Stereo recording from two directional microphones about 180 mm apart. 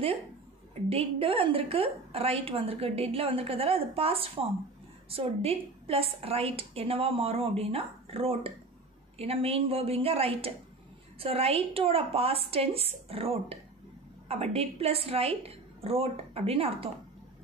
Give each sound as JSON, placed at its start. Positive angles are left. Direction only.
{"t": 0.8, "sound": "a woman's voice", "side_deg": -30}